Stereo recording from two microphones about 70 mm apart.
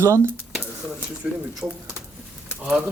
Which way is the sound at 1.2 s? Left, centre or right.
Centre.